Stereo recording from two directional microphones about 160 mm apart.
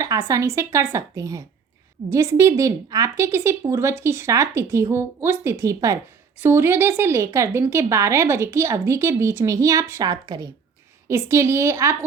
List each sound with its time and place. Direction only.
0.0 s a woman's voice: 20° right (ahead or behind)